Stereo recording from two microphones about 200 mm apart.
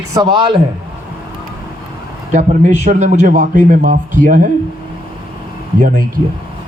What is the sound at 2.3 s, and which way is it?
A man's voice, 40° right (ahead or behind).